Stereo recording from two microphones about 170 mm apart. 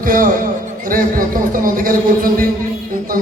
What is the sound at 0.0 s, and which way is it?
A man's voice, 55° right (ahead or behind).